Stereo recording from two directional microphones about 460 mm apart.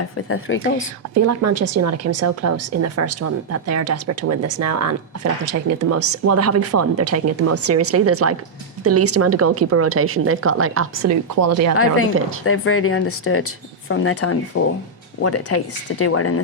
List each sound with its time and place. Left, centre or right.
0.0 s speech: left
1.1 s a woman's voice: right
12.5 s speech: left